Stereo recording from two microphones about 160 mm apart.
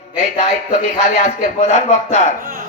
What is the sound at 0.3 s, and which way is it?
Speech, 45° left (ahead or behind).